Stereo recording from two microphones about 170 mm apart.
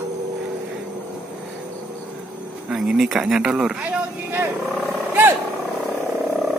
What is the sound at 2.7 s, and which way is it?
Speech, 5° right (ahead or behind).